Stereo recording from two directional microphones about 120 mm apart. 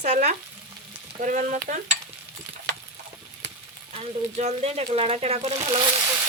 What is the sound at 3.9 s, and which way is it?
Speech, 65° right (ahead or behind).